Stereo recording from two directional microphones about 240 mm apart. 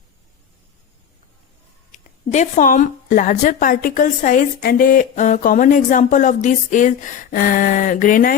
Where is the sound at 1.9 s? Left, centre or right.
Left.